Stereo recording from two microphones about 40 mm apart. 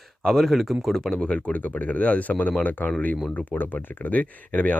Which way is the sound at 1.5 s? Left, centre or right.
Left.